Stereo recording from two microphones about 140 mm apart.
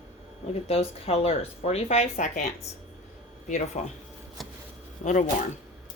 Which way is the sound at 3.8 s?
50° left (ahead or behind).